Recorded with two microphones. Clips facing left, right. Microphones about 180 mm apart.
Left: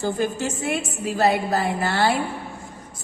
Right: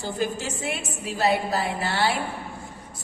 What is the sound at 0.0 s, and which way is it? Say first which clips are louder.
Music: left 4 dB; 50° left (ahead or behind).